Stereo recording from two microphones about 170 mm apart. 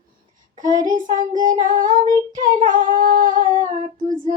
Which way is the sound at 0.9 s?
50° right (ahead or behind).